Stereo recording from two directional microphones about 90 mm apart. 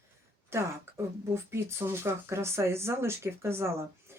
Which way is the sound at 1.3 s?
30° right (ahead or behind).